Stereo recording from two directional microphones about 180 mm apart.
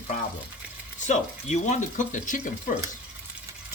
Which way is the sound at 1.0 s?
40° left (ahead or behind).